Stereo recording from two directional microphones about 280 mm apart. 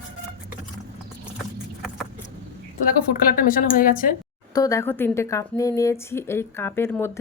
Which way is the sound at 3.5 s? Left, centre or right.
Left.